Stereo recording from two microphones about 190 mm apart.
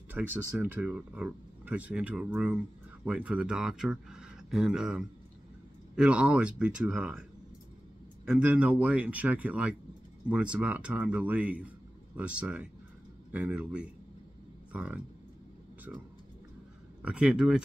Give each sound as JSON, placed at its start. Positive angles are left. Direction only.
{"t": 0.1, "sound": "speech", "side_deg": -10}
{"t": 8.3, "sound": "speech", "side_deg": -5}
{"t": 17.0, "sound": "speech", "side_deg": -5}